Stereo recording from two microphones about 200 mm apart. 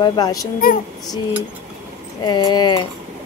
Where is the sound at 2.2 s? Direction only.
20° left (ahead or behind).